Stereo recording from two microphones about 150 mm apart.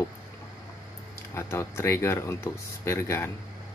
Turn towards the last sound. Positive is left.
turn(degrees=15)  # may be behind; listen again after turning